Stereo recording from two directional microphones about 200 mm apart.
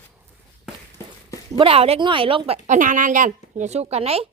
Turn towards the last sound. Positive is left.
turn(degrees=-30)  # may be behind; listen again after turning